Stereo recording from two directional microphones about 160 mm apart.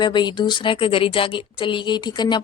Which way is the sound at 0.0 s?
30° left (ahead or behind).